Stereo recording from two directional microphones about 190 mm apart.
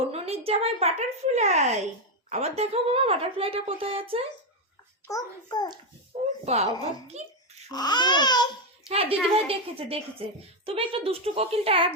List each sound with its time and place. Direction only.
0.1 s a woman's voice: 30° right (ahead or behind)
5.0 s speech: 20° left (ahead or behind)
6.4 s a woman's voice: 35° right (ahead or behind)
7.7 s speech: 20° left (ahead or behind)
8.9 s a woman's voice: 30° right (ahead or behind)